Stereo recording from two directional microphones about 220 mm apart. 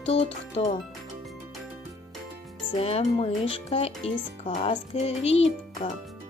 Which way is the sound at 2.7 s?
25° left (ahead or behind).